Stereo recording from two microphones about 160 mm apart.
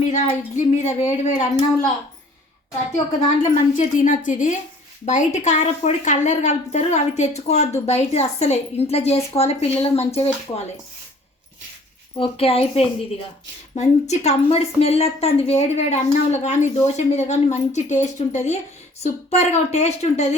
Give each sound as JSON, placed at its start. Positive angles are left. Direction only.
{"t": 0.1, "sound": "a woman's voice", "side_deg": 50}
{"t": 3.2, "sound": "a woman's voice", "side_deg": 50}
{"t": 12.1, "sound": "a woman's voice", "side_deg": 35}